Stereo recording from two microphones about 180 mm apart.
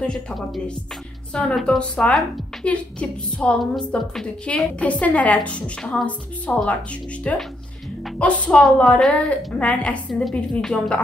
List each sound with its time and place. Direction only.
1.3 s a woman's voice: 5° left (ahead or behind)